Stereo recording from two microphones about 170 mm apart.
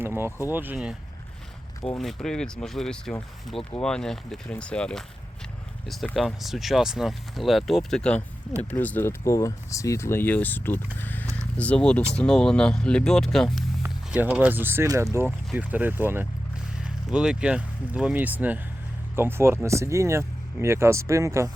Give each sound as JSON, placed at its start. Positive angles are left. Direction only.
{"t": 0.0, "sound": "speech", "side_deg": -15}
{"t": 0.3, "sound": "speech", "side_deg": 15}
{"t": 0.5, "sound": "speech", "side_deg": -10}
{"t": 1.8, "sound": "speech", "side_deg": 5}
{"t": 6.1, "sound": "speech", "side_deg": 0}
{"t": 11.0, "sound": "a sound", "side_deg": 10}
{"t": 11.3, "sound": "speech", "side_deg": 10}
{"t": 13.8, "sound": "speech", "side_deg": -10}